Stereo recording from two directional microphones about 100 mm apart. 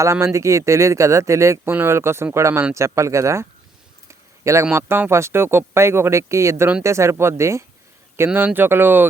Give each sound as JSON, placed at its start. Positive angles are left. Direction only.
{"t": 0.0, "sound": "speech", "side_deg": -30}
{"t": 4.1, "sound": "a sound", "side_deg": -30}
{"t": 4.7, "sound": "speech", "side_deg": -20}